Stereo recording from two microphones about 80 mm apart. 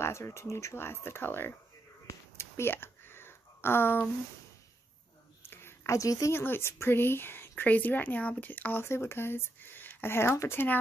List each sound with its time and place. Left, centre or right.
0.0 s speech: left
2.3 s a sound: left
5.4 s a sound: left
5.9 s speech: left
6.3 s a woman's voice: left
8.8 s a woman's voice: left